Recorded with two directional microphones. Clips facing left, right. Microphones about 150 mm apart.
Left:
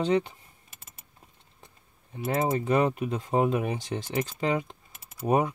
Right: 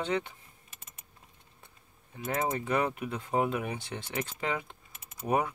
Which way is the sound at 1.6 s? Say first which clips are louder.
Left 5 dB; 30° left (ahead or behind).